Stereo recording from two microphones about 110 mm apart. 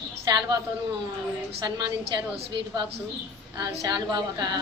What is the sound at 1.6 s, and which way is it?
A woman's voice, 40° right (ahead or behind).